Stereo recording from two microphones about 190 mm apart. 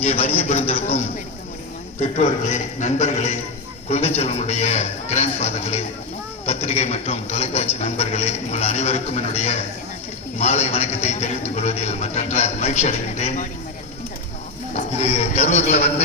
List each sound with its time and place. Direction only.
0.0 s a man's voice: 30° left (ahead or behind)
2.1 s a man's voice: 35° left (ahead or behind)
14.8 s a man's voice: 35° left (ahead or behind)